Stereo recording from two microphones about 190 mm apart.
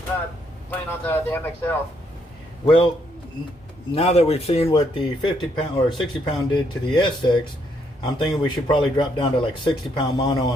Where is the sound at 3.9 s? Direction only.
30° left (ahead or behind).